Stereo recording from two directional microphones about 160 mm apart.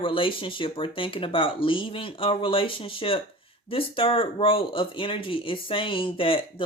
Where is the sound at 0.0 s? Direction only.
35° left (ahead or behind).